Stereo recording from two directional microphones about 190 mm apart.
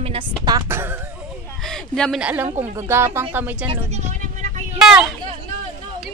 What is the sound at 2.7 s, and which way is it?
Speech, 15° right (ahead or behind).